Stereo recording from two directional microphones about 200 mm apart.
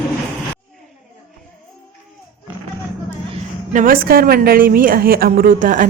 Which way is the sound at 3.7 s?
45° right (ahead or behind).